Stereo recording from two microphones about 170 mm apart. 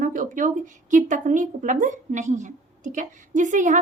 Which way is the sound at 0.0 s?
50° right (ahead or behind).